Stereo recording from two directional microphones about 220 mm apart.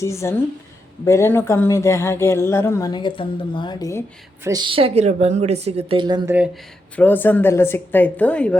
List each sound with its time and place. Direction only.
0.0 s speech: 15° left (ahead or behind)
4.4 s a woman's voice: 20° right (ahead or behind)
6.9 s speech: 10° left (ahead or behind)